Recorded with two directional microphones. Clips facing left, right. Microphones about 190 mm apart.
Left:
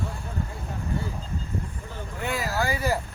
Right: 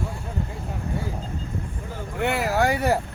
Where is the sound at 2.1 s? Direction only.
70° right (ahead or behind).